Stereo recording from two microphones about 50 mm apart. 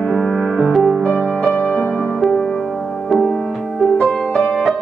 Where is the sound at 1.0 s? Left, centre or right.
Centre.